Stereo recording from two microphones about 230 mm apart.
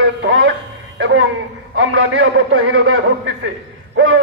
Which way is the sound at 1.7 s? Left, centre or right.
Right.